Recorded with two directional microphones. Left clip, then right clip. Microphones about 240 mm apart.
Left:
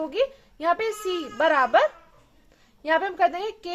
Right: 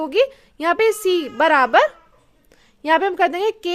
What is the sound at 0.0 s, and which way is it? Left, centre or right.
A woman's voice, right.